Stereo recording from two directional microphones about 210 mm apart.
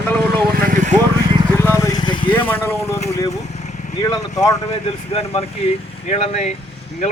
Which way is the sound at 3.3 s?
35° left (ahead or behind).